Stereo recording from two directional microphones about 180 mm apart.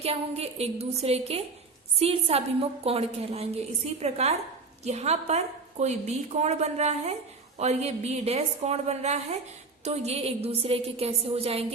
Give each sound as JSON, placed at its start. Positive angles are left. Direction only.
{"t": 0.0, "sound": "a woman's voice", "side_deg": -35}